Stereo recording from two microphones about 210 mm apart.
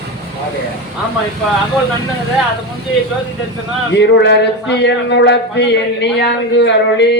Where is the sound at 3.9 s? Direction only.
55° left (ahead or behind).